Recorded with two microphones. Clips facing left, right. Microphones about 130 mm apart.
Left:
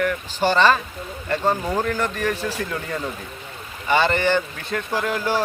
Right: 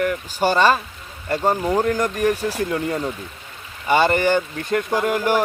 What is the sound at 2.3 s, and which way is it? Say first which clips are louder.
Speech: right 4 dB; 10° right (ahead or behind).